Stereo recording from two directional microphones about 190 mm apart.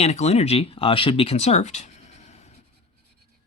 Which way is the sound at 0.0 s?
35° left (ahead or behind).